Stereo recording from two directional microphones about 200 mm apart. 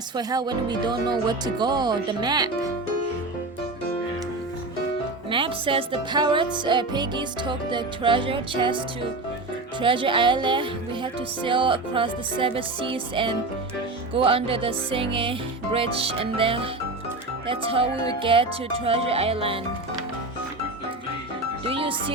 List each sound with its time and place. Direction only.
0.2 s speech: 20° right (ahead or behind)
5.3 s speech: 25° right (ahead or behind)
9.8 s speech: 25° right (ahead or behind)
21.7 s speech: 25° right (ahead or behind)